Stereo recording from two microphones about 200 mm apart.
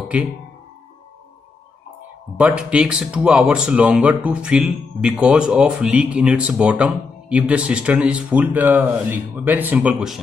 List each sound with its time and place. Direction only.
0.1 s speech: 5° right (ahead or behind)
2.3 s speech: 5° right (ahead or behind)